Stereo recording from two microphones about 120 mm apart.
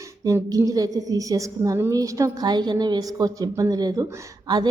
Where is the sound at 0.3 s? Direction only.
30° right (ahead or behind).